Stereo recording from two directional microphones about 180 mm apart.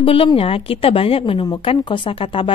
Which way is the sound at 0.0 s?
30° left (ahead or behind).